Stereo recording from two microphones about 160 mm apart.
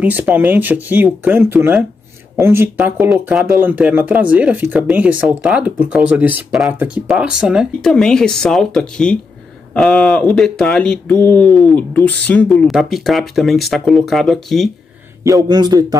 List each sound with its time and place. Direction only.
0.0 s speech: 10° right (ahead or behind)
2.8 s speech: centre (ahead or behind)
15.2 s speech: 25° right (ahead or behind)